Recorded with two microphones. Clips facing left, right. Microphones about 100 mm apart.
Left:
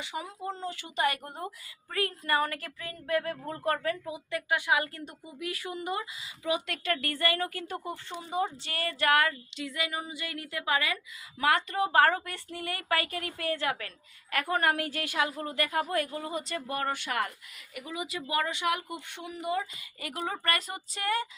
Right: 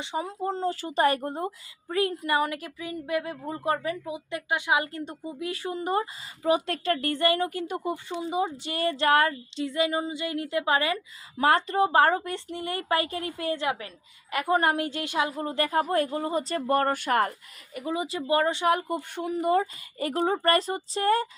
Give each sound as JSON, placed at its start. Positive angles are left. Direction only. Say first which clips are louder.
{"t": 0.0, "sound": "speech", "louder": "right 6 dB", "side_deg": -30}